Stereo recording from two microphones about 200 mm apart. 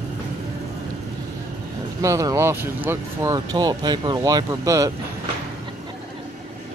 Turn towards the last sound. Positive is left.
turn(degrees=-15)  # may be behind; listen again after turning